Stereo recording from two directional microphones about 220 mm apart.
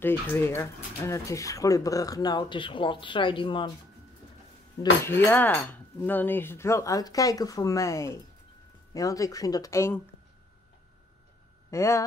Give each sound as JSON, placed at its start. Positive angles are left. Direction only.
{"t": 0.0, "sound": "speech", "side_deg": 10}
{"t": 5.0, "sound": "speech", "side_deg": 10}
{"t": 11.7, "sound": "speech", "side_deg": 10}